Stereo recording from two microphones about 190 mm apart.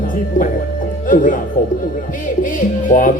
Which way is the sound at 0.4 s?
45° left (ahead or behind).